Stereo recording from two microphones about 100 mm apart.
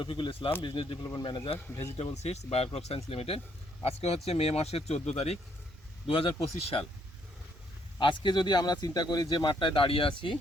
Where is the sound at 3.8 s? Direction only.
90° left.